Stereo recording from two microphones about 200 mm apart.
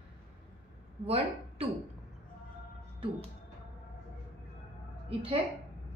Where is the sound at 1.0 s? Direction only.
30° right (ahead or behind).